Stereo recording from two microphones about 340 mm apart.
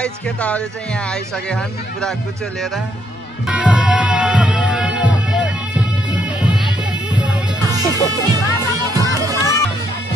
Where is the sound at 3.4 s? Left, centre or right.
Centre.